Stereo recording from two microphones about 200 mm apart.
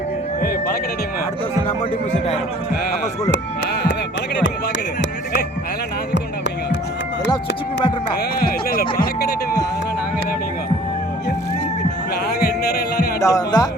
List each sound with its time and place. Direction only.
8.4 s speech: 45° left (ahead or behind)
12.4 s music: 50° left (ahead or behind)
13.1 s speech: 15° left (ahead or behind)